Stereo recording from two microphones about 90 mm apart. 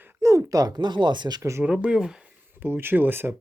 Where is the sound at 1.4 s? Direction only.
30° right (ahead or behind).